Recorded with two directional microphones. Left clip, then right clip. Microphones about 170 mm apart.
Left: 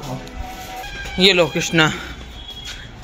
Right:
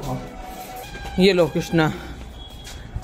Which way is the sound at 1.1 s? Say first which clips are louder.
Left 3 dB; 30° right (ahead or behind).